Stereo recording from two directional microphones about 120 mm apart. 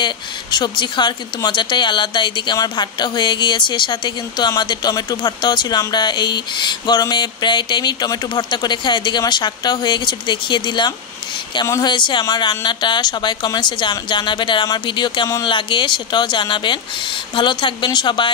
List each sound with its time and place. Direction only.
0.0 s speech: 40° left (ahead or behind)